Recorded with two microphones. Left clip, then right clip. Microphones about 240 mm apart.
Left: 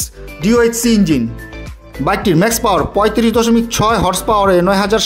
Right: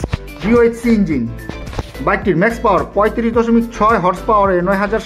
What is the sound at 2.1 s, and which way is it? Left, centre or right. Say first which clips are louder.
Speech: left 1 dB; left.